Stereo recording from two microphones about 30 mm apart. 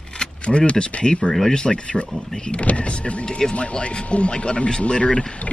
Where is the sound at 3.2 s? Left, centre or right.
Left.